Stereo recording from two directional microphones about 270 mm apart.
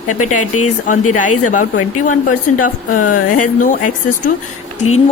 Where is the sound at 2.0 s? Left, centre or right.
Left.